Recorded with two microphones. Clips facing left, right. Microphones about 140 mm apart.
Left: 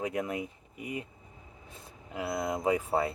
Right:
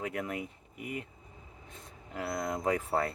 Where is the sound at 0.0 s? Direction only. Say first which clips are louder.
Left 3 dB; 15° left (ahead or behind).